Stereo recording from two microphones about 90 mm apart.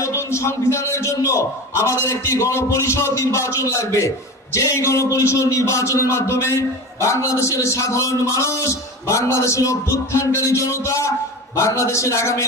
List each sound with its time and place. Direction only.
0.0 s a man's voice: 35° left (ahead or behind)